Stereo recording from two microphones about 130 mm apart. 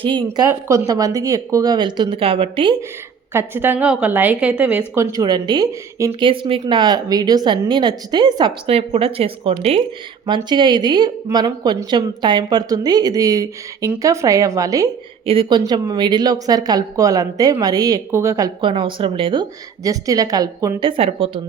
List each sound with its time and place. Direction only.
0.0 s speech: 40° right (ahead or behind)
0.3 s speech: 25° right (ahead or behind); by 2.7 s 40° right (ahead or behind)
3.3 s a woman's voice: 15° right (ahead or behind)
4.9 s speech: 30° right (ahead or behind)
6.1 s speech: 40° right (ahead or behind)
8.7 s speech: 50° right (ahead or behind)
10.2 s speech: 35° right (ahead or behind)
15.3 s speech: 40° right (ahead or behind)
18.6 s speech: 40° right (ahead or behind)